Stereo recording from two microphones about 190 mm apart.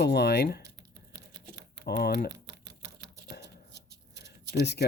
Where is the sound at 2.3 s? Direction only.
65° right (ahead or behind).